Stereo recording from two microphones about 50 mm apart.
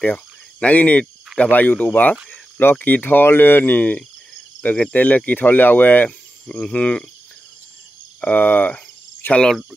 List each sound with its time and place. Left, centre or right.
0.0 s speech: left
6.0 s speech: left
8.2 s cricket: left